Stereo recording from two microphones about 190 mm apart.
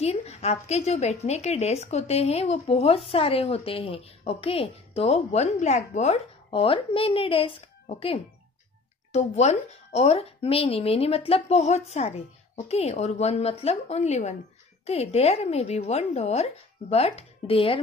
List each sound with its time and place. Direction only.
0.0 s speech: 35° left (ahead or behind)